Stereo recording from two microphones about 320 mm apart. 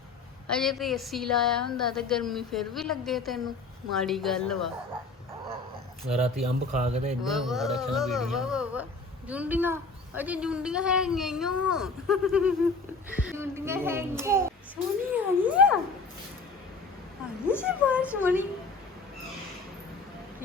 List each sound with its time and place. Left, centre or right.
0.5 s speech: centre
6.4 s speech: centre
7.2 s a child's voice: centre
17.6 s speech: centre